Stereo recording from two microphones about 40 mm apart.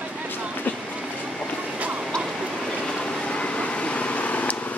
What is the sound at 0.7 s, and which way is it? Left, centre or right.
Train, left.